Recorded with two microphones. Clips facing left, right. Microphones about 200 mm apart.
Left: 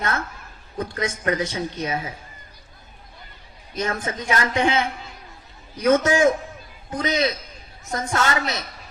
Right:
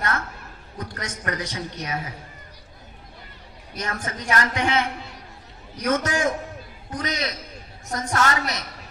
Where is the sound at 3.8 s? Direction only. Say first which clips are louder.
Left 5 dB; 25° left (ahead or behind).